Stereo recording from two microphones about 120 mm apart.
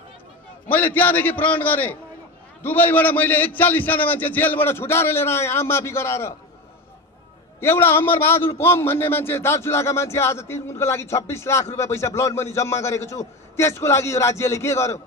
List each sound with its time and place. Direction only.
0.7 s a man's voice: 15° left (ahead or behind)
7.6 s a man's voice: 20° left (ahead or behind)